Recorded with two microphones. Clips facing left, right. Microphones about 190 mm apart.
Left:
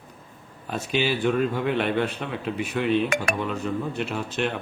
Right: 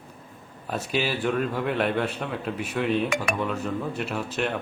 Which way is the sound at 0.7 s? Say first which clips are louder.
Left 2 dB; centre (ahead or behind).